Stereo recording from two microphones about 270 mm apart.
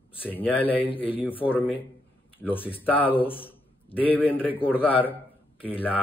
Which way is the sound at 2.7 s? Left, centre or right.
Centre.